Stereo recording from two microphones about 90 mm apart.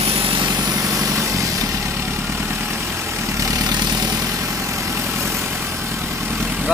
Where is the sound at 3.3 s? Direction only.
40° right (ahead or behind).